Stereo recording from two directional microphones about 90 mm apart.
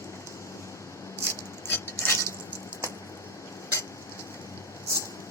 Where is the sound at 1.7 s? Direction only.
30° left (ahead or behind).